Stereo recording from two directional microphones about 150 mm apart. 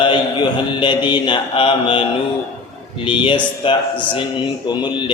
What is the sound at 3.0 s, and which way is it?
A man's voice, 35° left (ahead or behind).